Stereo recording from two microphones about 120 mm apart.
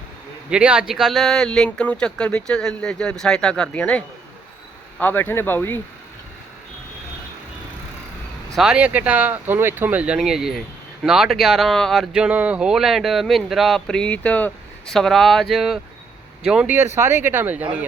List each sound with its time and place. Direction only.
0.5 s speech: 10° right (ahead or behind); by 5.8 s 15° left (ahead or behind)
8.5 s speech: 5° right (ahead or behind)
16.9 s speech: 20° right (ahead or behind)